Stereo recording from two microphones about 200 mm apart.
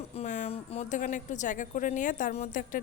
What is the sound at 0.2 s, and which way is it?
Speech, 35° left (ahead or behind).